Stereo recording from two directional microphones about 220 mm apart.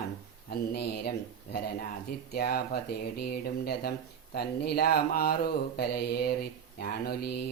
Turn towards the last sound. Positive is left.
turn(degrees=45)  # may be behind; listen again after turning